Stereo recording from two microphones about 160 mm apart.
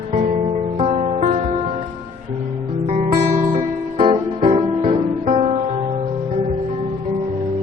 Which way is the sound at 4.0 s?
35° right (ahead or behind).